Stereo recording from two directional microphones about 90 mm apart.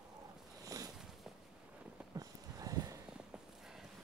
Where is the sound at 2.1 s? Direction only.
40° right (ahead or behind).